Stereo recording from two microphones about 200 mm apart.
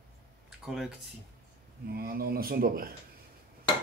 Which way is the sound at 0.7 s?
5° right (ahead or behind).